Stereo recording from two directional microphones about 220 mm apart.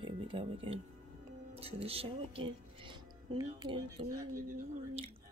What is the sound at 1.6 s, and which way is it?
Speech, 25° right (ahead or behind).